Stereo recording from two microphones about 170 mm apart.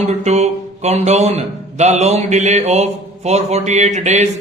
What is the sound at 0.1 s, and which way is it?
A man's voice, 40° right (ahead or behind).